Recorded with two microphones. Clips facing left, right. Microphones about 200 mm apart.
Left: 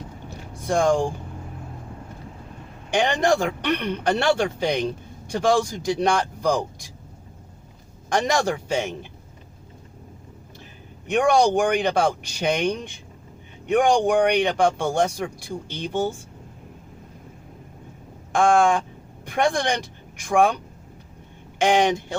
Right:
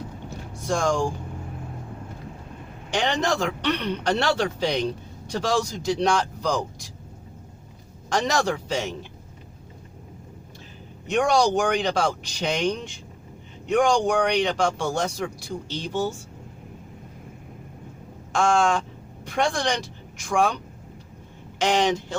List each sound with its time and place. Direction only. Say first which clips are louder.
0.7 s speech: left 4 dB; 55° left (ahead or behind)
2.9 s speech: left 4 dB; 55° left (ahead or behind)
8.3 s speech: left 2 dB; 50° left (ahead or behind)
11.0 s speech: left 2 dB; 55° left (ahead or behind)
18.3 s speech: left 3 dB; 55° left (ahead or behind)
21.6 s speech: left 3 dB; 55° left (ahead or behind)